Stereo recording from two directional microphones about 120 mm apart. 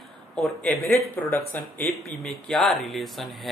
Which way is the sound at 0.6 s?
15° left (ahead or behind).